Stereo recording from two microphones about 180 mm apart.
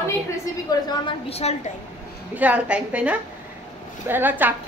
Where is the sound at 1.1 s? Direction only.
35° left (ahead or behind).